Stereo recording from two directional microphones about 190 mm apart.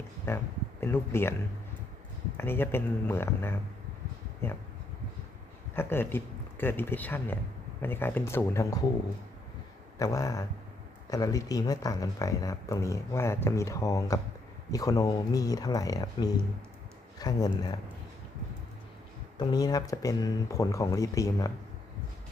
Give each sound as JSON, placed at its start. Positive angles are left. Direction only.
{"t": 0.3, "sound": "speech", "side_deg": 15}
{"t": 2.4, "sound": "speech", "side_deg": 10}
{"t": 5.7, "sound": "speech", "side_deg": 10}
{"t": 10.0, "sound": "speech", "side_deg": 15}
{"t": 19.4, "sound": "speech", "side_deg": 20}